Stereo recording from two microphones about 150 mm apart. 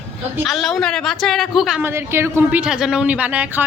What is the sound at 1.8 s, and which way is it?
Speech, 15° right (ahead or behind).